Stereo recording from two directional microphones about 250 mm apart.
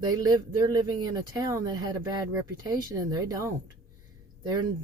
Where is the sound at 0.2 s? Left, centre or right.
Centre.